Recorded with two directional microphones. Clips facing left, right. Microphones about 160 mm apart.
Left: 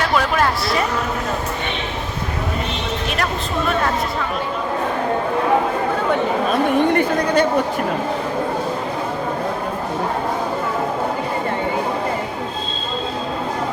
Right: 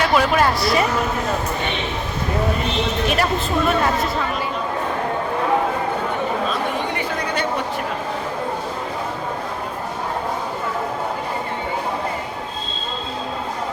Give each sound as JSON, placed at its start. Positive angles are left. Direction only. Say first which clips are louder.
{"t": 0.2, "sound": "speech", "louder": "right 1 dB", "side_deg": -5}
{"t": 6.5, "sound": "a woman's voice", "louder": "left 7 dB", "side_deg": 55}